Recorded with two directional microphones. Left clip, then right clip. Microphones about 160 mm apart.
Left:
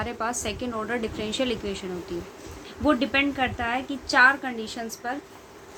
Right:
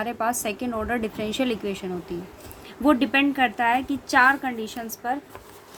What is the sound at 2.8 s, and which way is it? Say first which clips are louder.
A woman's voice: right 2 dB; 50° right (ahead or behind).